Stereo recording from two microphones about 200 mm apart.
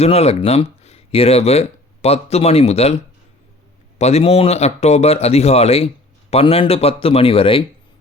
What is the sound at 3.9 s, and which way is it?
Speech, 30° left (ahead or behind).